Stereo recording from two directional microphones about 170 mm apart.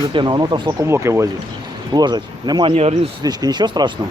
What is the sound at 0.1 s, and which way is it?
Speech, 30° right (ahead or behind).